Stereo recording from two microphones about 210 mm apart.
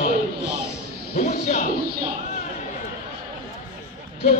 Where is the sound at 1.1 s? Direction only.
35° left (ahead or behind).